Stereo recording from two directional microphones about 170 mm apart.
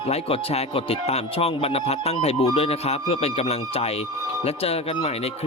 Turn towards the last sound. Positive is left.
turn(degrees=35)  # may be behind; listen again after turning